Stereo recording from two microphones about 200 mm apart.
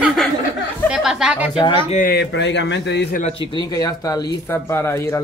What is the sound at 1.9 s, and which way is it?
Speech, 45° left (ahead or behind).